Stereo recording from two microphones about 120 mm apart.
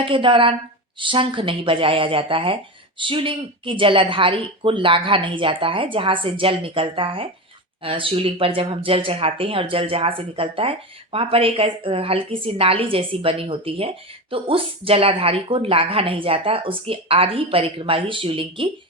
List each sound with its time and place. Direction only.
0.0 s speech: 45° right (ahead or behind)